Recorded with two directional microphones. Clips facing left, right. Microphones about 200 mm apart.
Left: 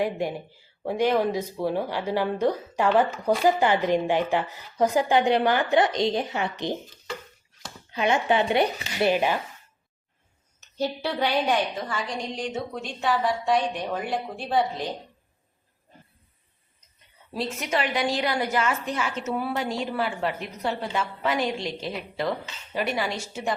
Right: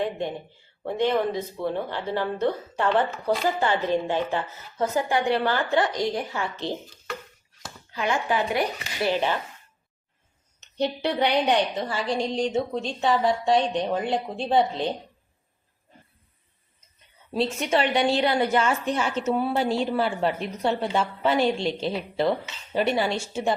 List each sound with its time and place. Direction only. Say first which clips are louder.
0.0 s speech: left 1 dB; 10° left (ahead or behind)
7.9 s speech: left 3 dB; 20° left (ahead or behind)
9.0 s speech: left 1 dB; 10° left (ahead or behind)
10.8 s a woman's voice: right 2 dB; 20° right (ahead or behind)
17.3 s a woman's voice: right 4 dB; 30° right (ahead or behind)